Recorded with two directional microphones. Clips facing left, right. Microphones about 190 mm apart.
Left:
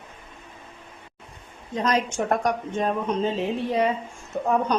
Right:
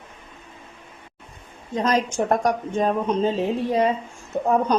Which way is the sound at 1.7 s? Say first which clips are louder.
Right 2 dB; 35° right (ahead or behind).